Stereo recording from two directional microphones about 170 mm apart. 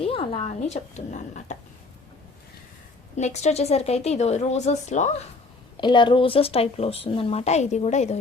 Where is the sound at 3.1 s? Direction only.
40° left (ahead or behind).